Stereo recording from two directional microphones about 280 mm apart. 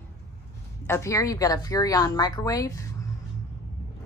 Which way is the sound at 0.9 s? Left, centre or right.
Centre.